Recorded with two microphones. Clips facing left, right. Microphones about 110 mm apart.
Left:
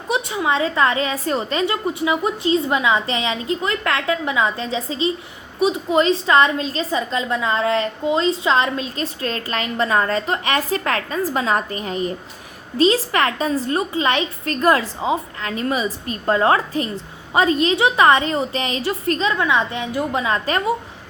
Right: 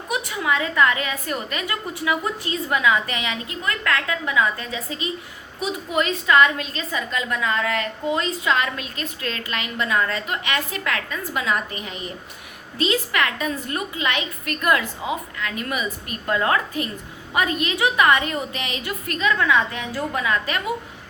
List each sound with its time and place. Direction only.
0.1 s a woman's voice: 25° left (ahead or behind)